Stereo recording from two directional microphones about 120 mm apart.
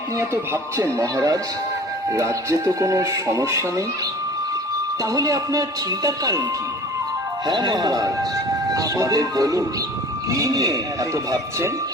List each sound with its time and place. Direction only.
0.2 s speech: 20° right (ahead or behind)
5.0 s speech: 30° right (ahead or behind)
7.4 s speech: 35° right (ahead or behind)